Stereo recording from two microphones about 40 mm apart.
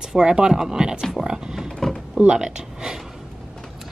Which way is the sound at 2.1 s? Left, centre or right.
Centre.